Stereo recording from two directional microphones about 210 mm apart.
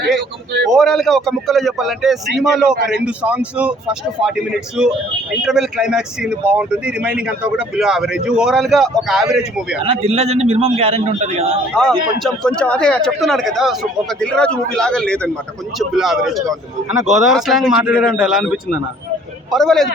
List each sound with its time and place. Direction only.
0.7 s speech: centre (ahead or behind)
4.8 s speech: 5° right (ahead or behind)
9.8 s a man's voice: 25° right (ahead or behind)
11.7 s speech: 5° left (ahead or behind)